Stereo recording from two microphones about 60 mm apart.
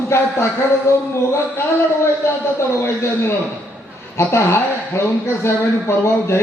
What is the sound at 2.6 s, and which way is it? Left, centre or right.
Speech, left.